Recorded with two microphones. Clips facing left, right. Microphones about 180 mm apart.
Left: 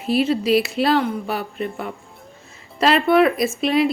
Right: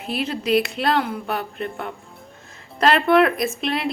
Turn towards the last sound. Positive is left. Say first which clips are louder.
# left 6 dB
turn(degrees=0)  # may be behind; listen again after turning